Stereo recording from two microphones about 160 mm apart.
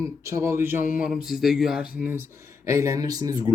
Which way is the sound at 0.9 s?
5° right (ahead or behind).